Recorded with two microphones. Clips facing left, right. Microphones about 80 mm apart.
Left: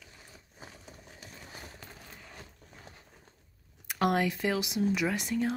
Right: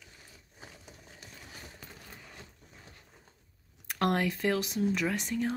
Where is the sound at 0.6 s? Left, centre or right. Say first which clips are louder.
Left 1 dB; left.